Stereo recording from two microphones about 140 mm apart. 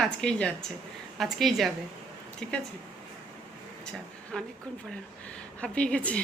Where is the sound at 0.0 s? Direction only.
5° left (ahead or behind).